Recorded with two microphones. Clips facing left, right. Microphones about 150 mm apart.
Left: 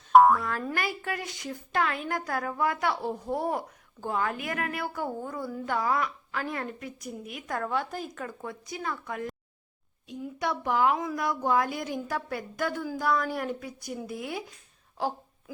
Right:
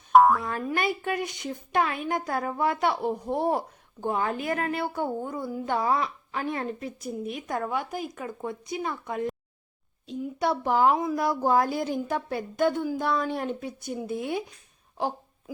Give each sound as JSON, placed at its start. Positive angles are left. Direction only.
{"t": 0.1, "sound": "boing", "side_deg": 0}
{"t": 0.4, "sound": "a woman's voice", "side_deg": -20}